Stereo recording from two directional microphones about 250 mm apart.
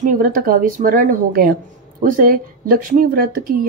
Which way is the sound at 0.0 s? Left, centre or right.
Right.